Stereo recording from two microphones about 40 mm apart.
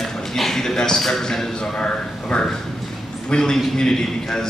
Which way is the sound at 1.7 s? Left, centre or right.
Left.